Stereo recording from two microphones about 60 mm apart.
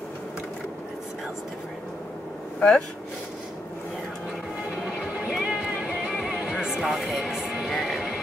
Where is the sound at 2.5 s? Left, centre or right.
Centre.